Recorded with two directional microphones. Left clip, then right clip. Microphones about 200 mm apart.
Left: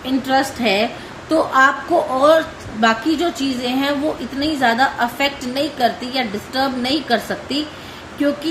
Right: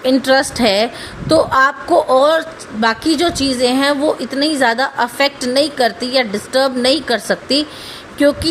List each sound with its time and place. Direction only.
0.0 s a woman's voice: 50° right (ahead or behind)